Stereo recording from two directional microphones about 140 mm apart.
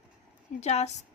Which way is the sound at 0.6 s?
50° left (ahead or behind).